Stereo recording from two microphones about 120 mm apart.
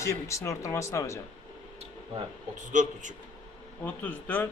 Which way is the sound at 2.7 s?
90° right.